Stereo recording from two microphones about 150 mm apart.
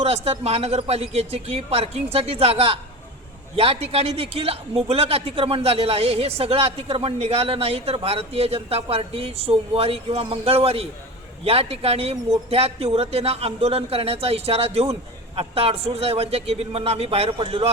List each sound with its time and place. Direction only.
0.0 s speech: 45° right (ahead or behind)